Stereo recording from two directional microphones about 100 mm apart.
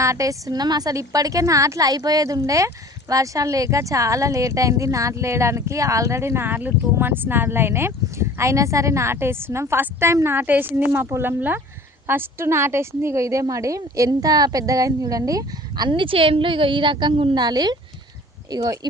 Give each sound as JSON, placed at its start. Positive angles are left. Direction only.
{"t": 0.0, "sound": "a woman's voice", "side_deg": -35}
{"t": 15.9, "sound": "a woman's voice", "side_deg": -60}